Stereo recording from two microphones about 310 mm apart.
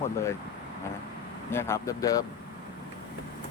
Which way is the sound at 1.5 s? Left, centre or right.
Centre.